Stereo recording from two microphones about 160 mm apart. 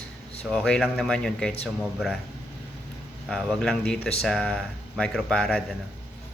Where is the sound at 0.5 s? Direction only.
5° left (ahead or behind).